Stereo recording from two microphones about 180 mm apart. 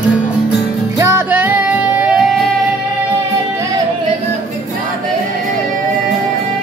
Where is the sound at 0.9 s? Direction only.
15° right (ahead or behind).